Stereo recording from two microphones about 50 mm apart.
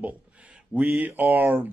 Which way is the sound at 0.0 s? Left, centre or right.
Right.